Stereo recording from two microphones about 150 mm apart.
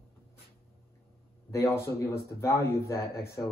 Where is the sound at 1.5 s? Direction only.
20° left (ahead or behind).